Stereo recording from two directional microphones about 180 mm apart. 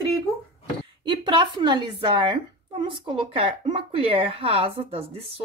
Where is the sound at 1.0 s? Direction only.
25° right (ahead or behind).